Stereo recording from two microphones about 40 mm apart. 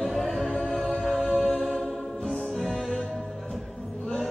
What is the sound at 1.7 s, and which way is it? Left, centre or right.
Music, centre.